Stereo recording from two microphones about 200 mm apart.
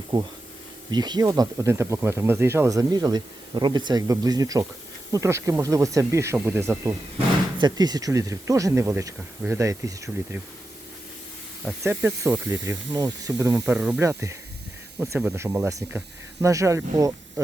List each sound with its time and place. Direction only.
0.1 s speech: 25° right (ahead or behind)
11.8 s speech: 15° right (ahead or behind)